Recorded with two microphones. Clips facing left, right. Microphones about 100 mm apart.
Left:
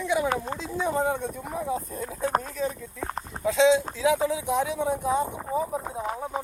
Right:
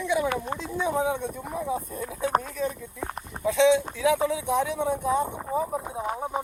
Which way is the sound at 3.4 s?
20° left (ahead or behind).